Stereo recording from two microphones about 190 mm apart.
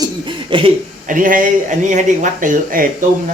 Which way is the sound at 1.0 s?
45° right (ahead or behind).